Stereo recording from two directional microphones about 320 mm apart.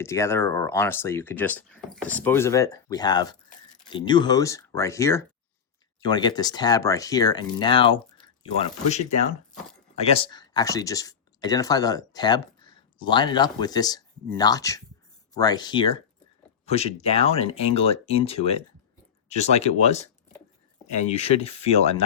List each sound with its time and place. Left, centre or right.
0.0 s speech: centre